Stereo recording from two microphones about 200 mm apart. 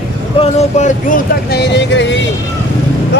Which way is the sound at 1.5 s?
55° left (ahead or behind).